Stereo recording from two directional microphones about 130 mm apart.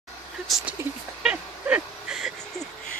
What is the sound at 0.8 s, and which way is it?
Speech, 15° right (ahead or behind).